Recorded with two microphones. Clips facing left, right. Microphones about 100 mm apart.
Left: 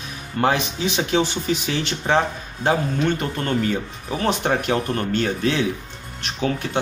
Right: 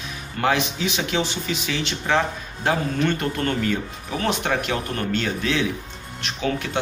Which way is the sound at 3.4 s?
30° left (ahead or behind).